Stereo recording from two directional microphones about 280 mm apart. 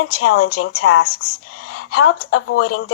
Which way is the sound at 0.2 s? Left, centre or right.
Left.